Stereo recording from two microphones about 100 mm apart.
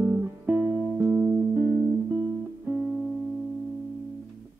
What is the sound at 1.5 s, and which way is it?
Music, 15° right (ahead or behind).